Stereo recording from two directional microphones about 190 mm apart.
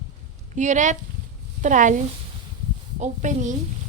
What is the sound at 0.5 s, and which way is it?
A woman's voice, 40° right (ahead or behind).